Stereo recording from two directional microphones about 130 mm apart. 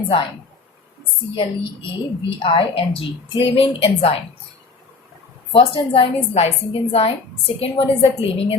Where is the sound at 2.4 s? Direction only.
45° left (ahead or behind).